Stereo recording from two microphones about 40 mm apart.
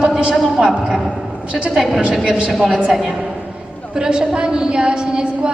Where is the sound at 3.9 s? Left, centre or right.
Right.